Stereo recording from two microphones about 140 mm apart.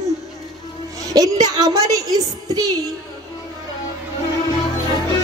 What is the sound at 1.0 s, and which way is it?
A woman's voice, 25° right (ahead or behind).